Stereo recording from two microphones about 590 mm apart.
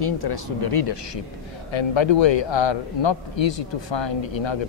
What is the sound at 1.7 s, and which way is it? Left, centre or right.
A man's voice, left.